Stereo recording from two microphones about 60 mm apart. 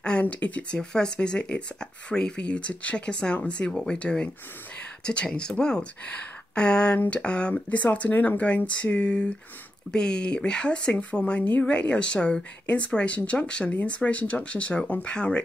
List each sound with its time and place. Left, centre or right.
0.0 s speech: centre